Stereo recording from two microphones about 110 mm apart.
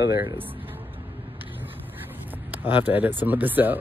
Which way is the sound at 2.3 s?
15° right (ahead or behind).